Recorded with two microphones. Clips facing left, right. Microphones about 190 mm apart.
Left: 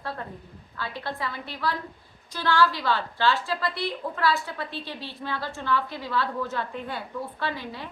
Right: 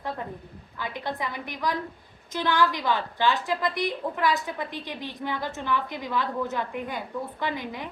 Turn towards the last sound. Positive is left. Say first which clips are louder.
# right 1 dB
turn(degrees=-15)  # may be behind; listen again after turning